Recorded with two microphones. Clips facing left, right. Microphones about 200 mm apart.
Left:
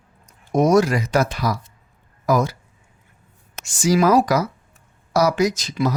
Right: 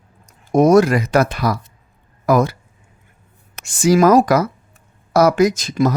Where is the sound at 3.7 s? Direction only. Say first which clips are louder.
Right 4 dB; 55° right (ahead or behind).